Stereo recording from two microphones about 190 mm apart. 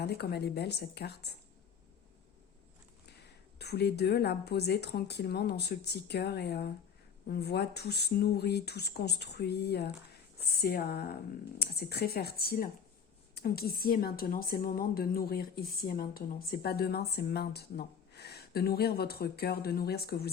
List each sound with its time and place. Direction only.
0.0 s speech: 60° left (ahead or behind)
3.6 s speech: 60° left (ahead or behind)